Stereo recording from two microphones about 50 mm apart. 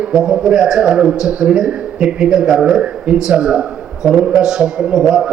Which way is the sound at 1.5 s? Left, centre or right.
Centre.